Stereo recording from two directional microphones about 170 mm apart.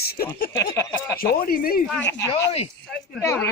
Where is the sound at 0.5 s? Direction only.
15° left (ahead or behind).